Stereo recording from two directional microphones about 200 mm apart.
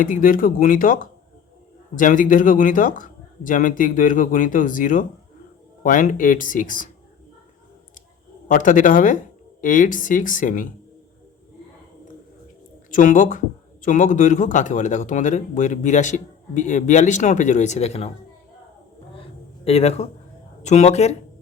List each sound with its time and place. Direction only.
0.0 s speech: 45° left (ahead or behind)
8.4 s speech: 40° left (ahead or behind)
12.9 s speech: 40° left (ahead or behind)
19.6 s speech: 30° left (ahead or behind)